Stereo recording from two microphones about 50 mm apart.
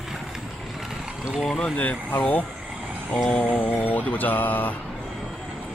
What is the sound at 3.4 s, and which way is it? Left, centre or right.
A man's voice, left.